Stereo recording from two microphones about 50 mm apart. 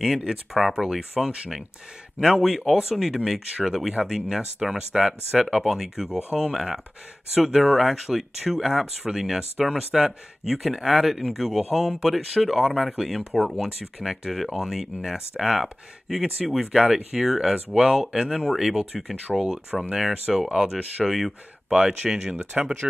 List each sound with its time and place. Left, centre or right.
0.0 s speech: centre
20.4 s speech: centre
20.7 s speech: centre
21.7 s speech: centre